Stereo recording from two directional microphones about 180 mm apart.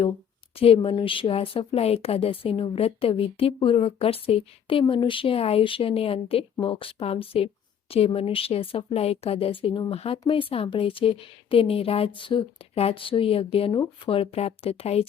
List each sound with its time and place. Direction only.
0.5 s speech: 30° left (ahead or behind)